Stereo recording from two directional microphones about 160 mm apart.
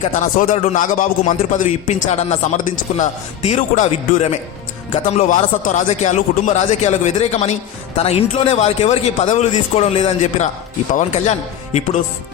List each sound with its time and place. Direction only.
0.2 s a man's voice: 55° left (ahead or behind)
4.9 s a man's voice: 55° left (ahead or behind)